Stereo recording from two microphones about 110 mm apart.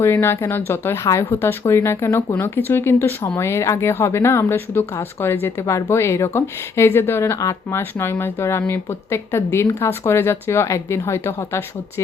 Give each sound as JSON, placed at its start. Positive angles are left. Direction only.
{"t": 0.0, "sound": "speech", "side_deg": 20}